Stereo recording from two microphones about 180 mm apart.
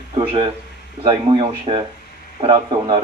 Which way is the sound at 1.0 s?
30° right (ahead or behind).